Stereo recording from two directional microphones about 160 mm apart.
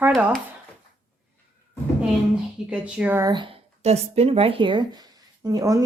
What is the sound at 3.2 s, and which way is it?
Speech, 30° right (ahead or behind).